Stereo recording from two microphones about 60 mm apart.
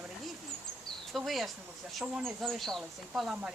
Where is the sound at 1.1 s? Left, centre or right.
Centre.